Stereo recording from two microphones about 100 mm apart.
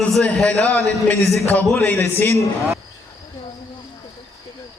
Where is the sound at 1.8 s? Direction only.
25° left (ahead or behind).